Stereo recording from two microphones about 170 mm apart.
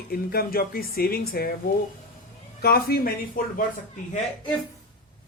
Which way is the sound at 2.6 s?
65° left (ahead or behind).